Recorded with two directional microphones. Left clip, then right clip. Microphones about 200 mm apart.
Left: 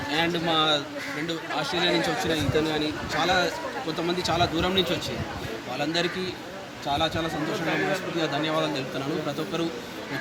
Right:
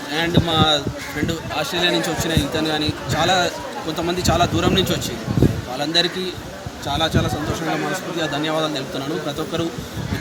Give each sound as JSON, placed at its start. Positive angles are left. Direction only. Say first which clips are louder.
{"t": 0.1, "sound": "speech", "louder": "right 5 dB", "side_deg": 5}
{"t": 1.3, "sound": "a man's voice", "louder": "right 3 dB", "side_deg": -15}
{"t": 3.9, "sound": "a man's voice", "louder": "right 7 dB", "side_deg": -10}
{"t": 5.8, "sound": "speech", "louder": "right 8 dB", "side_deg": 5}